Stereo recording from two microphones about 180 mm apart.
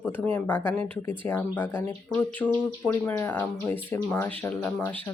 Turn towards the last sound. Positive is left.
turn(degrees=10)  # may be behind; listen again after turning